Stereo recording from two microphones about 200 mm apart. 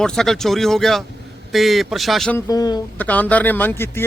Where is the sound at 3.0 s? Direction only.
10° left (ahead or behind).